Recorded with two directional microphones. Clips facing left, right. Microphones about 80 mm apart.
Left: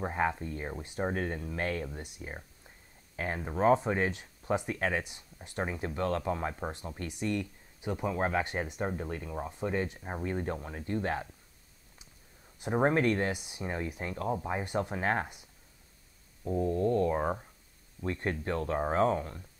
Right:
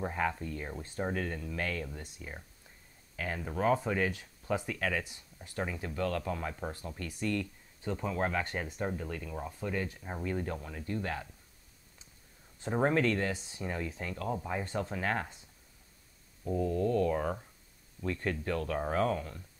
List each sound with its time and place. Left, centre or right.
0.0 s speech: left
1.1 s speech: left
2.0 s speech: centre
12.5 s a sound: centre
12.8 s speech: left
14.8 s speech: left
16.4 s speech: left